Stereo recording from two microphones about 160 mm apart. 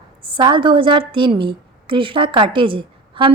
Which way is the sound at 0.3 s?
30° right (ahead or behind).